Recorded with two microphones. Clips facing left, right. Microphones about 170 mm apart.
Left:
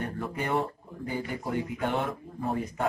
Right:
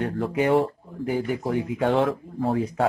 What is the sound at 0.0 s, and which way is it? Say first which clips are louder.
A man's voice: right 9 dB; 90° right.